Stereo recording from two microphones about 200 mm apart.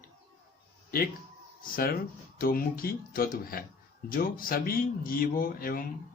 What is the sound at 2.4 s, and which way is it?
A man's voice, 45° left (ahead or behind).